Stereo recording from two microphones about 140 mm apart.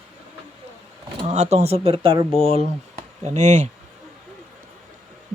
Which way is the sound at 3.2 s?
55° right (ahead or behind).